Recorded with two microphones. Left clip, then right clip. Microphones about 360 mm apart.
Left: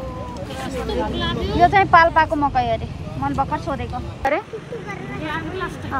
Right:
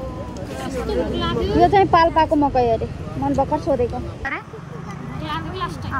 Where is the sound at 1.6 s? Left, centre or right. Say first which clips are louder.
Even; centre.